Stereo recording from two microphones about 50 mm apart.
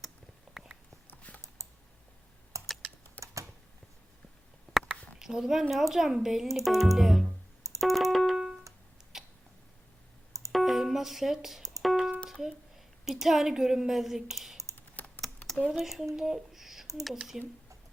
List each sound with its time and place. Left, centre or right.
0.5 s a sound: centre
1.1 s a sound: left
1.6 s typing: right
3.2 s typing: left
4.8 s a sound: centre
5.2 s speech: centre
7.8 s keyboard: centre
9.1 s a sound: centre
10.5 s music: centre
12.3 s a woman's voice: centre
15.0 s typing: left
15.7 s speech: centre